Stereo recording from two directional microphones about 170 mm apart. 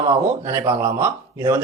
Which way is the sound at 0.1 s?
15° right (ahead or behind).